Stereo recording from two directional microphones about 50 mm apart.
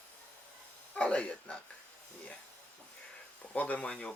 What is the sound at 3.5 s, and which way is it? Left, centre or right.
Speech, left.